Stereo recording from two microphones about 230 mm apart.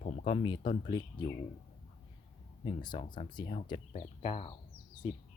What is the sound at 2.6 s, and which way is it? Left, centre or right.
Speech, centre.